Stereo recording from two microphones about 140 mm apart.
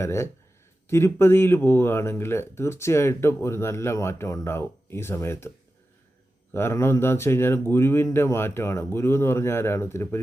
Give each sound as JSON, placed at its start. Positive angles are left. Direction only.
{"t": 0.0, "sound": "speech", "side_deg": 20}
{"t": 6.5, "sound": "speech", "side_deg": 15}